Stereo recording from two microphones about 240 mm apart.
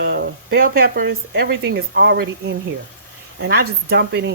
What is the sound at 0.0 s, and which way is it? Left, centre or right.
Speech, right.